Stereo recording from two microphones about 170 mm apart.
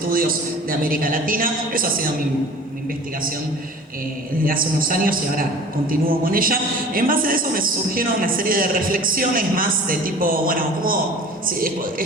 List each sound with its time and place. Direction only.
0.0 s a man's voice: 55° right (ahead or behind)
4.4 s a man's voice: 55° right (ahead or behind)